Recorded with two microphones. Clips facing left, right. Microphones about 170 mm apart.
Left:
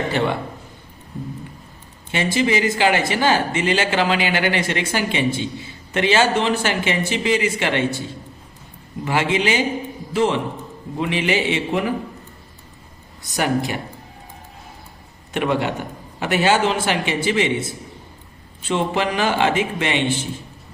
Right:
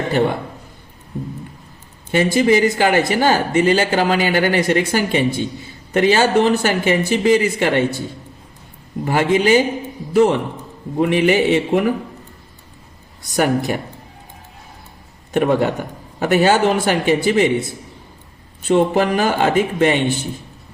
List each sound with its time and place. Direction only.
0.1 s a man's voice: 45° right (ahead or behind)
2.1 s speech: 45° right (ahead or behind)
9.0 s a man's voice: 40° right (ahead or behind)
13.3 s speech: 40° right (ahead or behind)
15.3 s speech: 40° right (ahead or behind)
18.7 s speech: 45° right (ahead or behind)